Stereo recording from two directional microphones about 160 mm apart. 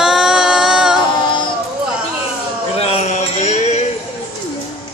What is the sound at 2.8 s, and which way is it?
Mantra, 40° left (ahead or behind).